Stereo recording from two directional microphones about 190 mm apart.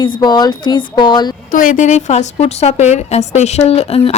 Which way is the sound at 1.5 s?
45° left (ahead or behind).